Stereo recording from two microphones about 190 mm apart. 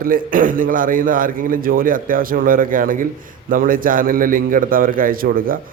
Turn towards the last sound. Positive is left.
turn(degrees=-50)  # may be behind; listen again after turning